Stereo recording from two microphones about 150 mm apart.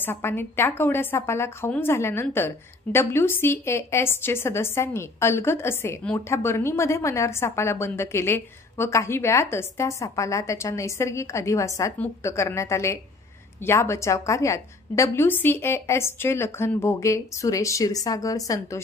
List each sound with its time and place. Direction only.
0.0 s a woman's voice: 15° left (ahead or behind)